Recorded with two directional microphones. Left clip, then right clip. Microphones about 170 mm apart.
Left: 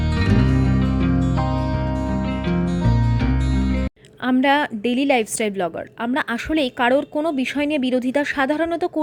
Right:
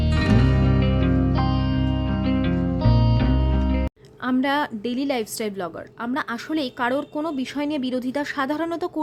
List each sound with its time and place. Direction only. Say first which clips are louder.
0.2 s music: left 1 dB; centre (ahead or behind)
4.3 s a woman's voice: left 5 dB; 15° left (ahead or behind)